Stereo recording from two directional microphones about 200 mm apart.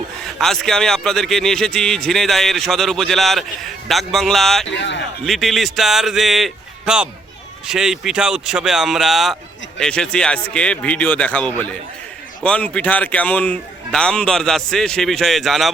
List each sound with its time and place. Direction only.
0.3 s a man's voice: centre (ahead or behind)
4.8 s a man's voice: 65° left (ahead or behind)
5.2 s a man's voice: centre (ahead or behind)